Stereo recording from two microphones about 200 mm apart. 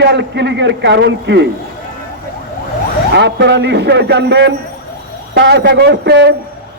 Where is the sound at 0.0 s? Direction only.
60° right (ahead or behind).